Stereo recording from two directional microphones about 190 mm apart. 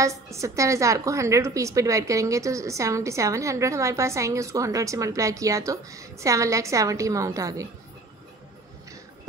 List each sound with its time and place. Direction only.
0.0 s a woman's voice: 15° right (ahead or behind)